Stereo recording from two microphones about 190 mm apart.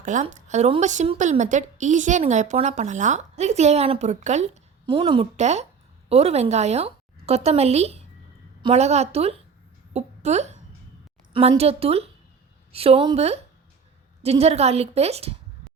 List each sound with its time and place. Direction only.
0.0 s a woman's voice: 40° right (ahead or behind)